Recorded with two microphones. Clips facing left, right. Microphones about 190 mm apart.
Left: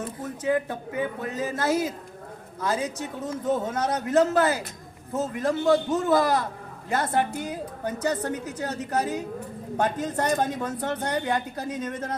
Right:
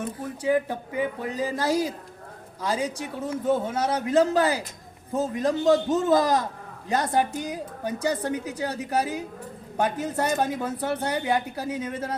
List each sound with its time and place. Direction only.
0.4 s speech: 15° right (ahead or behind)